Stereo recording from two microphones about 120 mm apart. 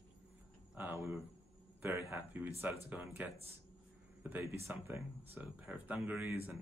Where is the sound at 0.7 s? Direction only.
20° right (ahead or behind).